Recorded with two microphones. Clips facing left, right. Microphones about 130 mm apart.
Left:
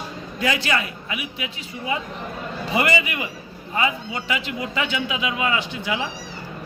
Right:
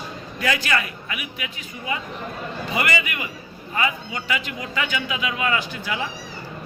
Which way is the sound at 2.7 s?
25° left (ahead or behind).